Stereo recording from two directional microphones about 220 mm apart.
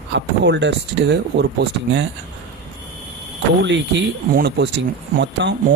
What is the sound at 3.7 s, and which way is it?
Speech, 50° right (ahead or behind).